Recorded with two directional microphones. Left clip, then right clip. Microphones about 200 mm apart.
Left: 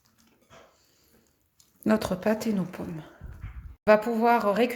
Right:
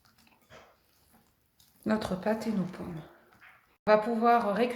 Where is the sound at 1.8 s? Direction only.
40° left (ahead or behind).